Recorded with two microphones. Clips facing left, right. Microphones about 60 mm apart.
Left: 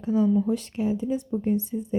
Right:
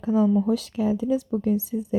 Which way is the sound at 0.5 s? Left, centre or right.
Right.